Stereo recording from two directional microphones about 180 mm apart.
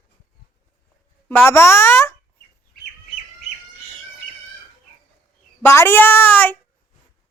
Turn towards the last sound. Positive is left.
turn(degrees=10)  # may be behind; listen again after turning